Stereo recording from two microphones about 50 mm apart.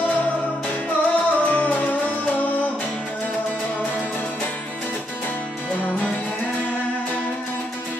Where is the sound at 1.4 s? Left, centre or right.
Left.